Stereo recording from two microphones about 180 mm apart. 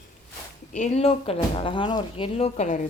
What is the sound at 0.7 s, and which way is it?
Speech, 40° left (ahead or behind).